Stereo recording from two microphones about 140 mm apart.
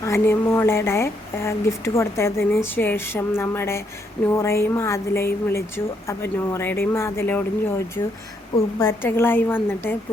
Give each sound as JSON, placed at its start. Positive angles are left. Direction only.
{"t": 0.0, "sound": "speech", "side_deg": 20}
{"t": 8.5, "sound": "speech", "side_deg": 20}